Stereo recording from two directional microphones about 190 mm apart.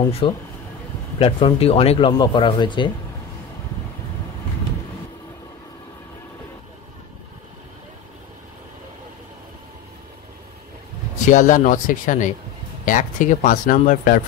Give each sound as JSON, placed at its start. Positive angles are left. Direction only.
{"t": 0.2, "sound": "speech", "side_deg": 25}
{"t": 11.2, "sound": "speech", "side_deg": 40}